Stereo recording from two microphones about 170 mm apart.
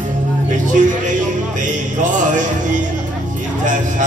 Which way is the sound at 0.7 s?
50° right (ahead or behind).